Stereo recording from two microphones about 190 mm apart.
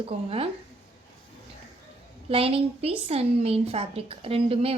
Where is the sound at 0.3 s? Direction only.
30° right (ahead or behind).